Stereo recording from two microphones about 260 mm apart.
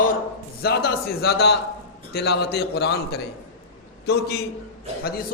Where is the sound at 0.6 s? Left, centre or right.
Left.